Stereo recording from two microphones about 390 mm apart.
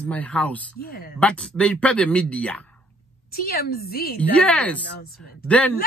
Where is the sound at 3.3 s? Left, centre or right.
Left.